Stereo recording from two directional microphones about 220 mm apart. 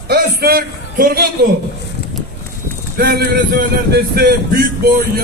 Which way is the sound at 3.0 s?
45° right (ahead or behind).